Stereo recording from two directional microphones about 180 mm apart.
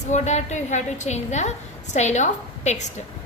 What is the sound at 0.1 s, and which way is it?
A woman's voice, 40° left (ahead or behind).